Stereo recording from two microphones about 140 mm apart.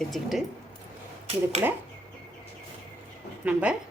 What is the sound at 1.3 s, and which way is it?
Speech, 50° right (ahead or behind).